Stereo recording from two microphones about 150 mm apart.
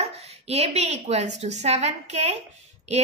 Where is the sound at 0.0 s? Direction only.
45° right (ahead or behind).